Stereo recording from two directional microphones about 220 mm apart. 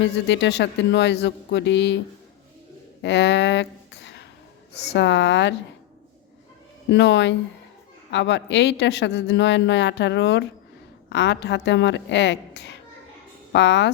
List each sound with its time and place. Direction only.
0.0 s speech: 55° left (ahead or behind)
3.0 s a sound: 55° left (ahead or behind)
4.9 s speech: 55° left (ahead or behind)
6.9 s a woman's voice: 55° left (ahead or behind)